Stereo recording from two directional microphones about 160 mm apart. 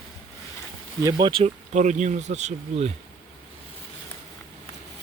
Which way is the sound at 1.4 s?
50° right (ahead or behind).